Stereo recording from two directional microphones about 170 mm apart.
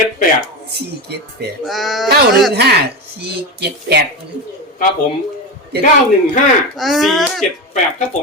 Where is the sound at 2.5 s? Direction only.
75° right (ahead or behind).